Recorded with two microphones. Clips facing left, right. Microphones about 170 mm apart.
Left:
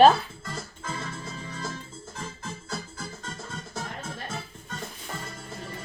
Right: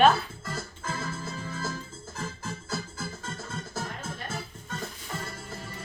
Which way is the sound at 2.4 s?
5° right (ahead or behind).